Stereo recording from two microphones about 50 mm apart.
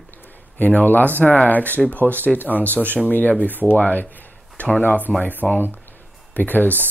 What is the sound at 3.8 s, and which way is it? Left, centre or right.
Speech, left.